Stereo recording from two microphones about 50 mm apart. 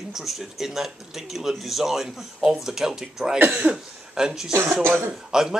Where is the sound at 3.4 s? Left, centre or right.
Right.